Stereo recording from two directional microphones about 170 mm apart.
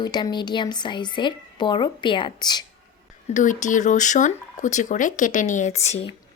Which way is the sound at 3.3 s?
45° left (ahead or behind).